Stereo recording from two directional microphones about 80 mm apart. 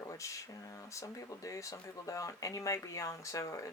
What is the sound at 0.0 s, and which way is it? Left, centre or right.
Speech, left.